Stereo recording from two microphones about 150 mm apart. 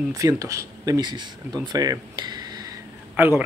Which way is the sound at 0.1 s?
20° right (ahead or behind).